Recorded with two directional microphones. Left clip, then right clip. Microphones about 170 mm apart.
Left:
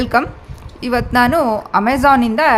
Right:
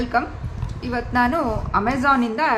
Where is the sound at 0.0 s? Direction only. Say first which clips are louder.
Left 6 dB; 90° left.